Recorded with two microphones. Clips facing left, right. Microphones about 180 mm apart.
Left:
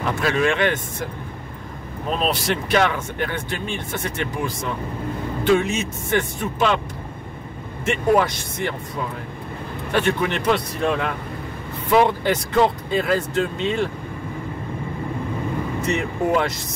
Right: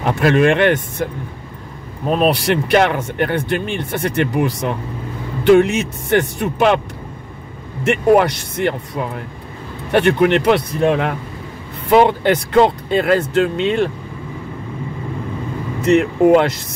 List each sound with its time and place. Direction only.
0.2 s speech: 60° right (ahead or behind)
2.2 s speech: 65° right (ahead or behind)
7.8 s speech: 65° right (ahead or behind)
9.9 s speech: 65° right (ahead or behind)
15.9 s speech: 65° right (ahead or behind)